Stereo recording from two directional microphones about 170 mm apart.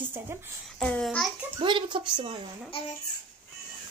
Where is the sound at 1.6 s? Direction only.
30° right (ahead or behind).